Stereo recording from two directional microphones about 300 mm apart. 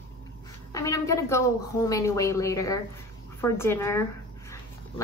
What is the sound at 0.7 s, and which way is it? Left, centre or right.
A woman's voice, centre.